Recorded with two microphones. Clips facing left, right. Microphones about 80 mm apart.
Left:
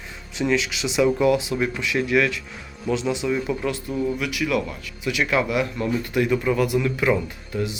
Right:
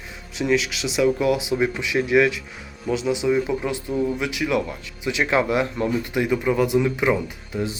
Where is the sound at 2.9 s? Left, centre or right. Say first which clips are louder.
Right 2 dB; centre.